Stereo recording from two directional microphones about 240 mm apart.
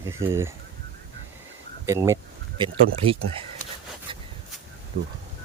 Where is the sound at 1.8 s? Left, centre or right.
Centre.